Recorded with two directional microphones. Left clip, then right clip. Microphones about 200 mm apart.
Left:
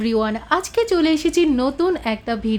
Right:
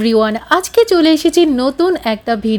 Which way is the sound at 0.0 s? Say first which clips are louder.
Right 8 dB; 30° right (ahead or behind).